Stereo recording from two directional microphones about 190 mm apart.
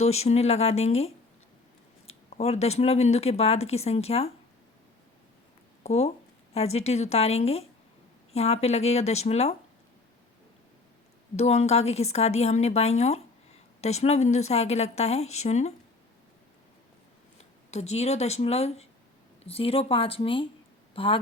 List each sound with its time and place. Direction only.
0.0 s speech: 35° left (ahead or behind)
2.3 s speech: 35° left (ahead or behind)
5.8 s speech: 35° left (ahead or behind)
11.3 s speech: 35° left (ahead or behind)
17.7 s speech: 35° left (ahead or behind)